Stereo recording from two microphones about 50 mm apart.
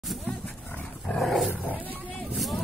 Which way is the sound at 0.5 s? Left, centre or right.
Left.